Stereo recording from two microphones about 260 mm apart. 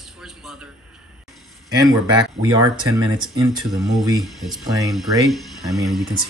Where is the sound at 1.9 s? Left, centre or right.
Centre.